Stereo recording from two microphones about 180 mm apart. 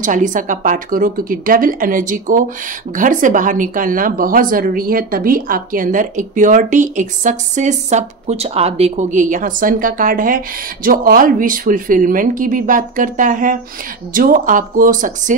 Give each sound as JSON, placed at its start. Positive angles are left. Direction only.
{"t": 0.0, "sound": "speech", "side_deg": -45}